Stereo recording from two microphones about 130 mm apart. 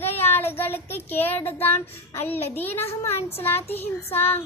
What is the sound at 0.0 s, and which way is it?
Child singing, 15° left (ahead or behind).